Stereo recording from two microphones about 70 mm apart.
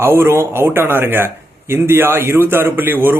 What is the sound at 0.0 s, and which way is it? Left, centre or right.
A man's voice, right.